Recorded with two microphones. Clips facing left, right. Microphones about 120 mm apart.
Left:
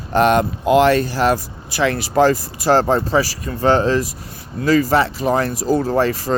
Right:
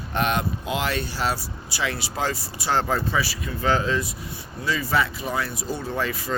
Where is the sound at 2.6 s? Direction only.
40° left (ahead or behind).